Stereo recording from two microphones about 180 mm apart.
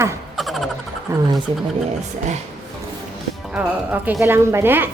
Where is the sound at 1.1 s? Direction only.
15° right (ahead or behind).